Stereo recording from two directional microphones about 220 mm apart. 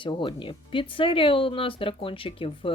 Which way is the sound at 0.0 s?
20° left (ahead or behind).